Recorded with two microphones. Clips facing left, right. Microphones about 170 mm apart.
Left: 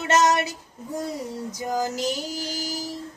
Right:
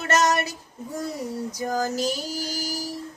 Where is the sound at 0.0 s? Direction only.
20° left (ahead or behind).